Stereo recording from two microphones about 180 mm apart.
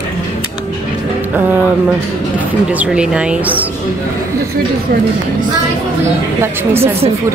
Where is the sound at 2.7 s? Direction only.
5° right (ahead or behind).